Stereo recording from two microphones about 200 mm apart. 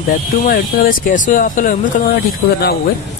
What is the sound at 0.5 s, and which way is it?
Speech, 45° left (ahead or behind).